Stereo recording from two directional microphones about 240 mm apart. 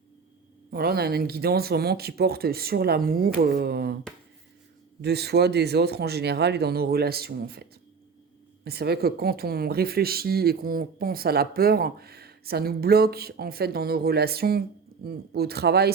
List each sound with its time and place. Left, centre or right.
0.7 s speech: right
5.0 s speech: right